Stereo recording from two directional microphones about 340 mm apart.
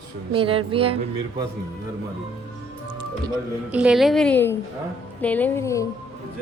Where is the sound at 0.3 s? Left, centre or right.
Centre.